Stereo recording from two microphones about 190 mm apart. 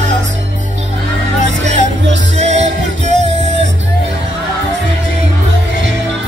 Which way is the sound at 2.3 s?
35° right (ahead or behind).